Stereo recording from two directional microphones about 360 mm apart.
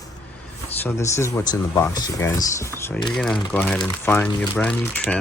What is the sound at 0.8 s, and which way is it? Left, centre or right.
Speech, centre.